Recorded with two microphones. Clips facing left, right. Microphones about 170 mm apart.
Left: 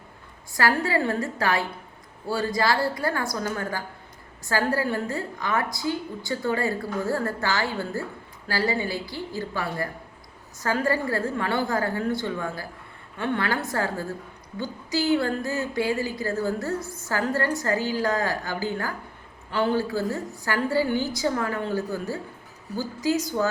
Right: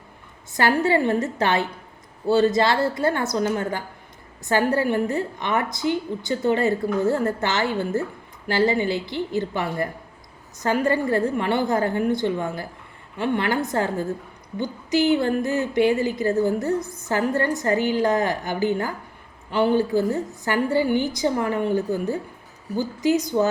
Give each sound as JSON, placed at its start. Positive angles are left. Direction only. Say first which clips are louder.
{"t": 0.5, "sound": "a woman's voice", "louder": "right 4 dB", "side_deg": -20}